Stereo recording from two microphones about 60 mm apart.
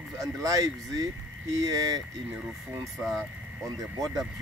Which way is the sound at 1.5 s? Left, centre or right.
Right.